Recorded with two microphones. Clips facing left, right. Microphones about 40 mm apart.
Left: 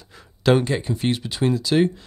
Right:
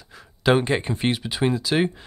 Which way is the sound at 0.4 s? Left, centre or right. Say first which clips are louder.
Left 1 dB; centre.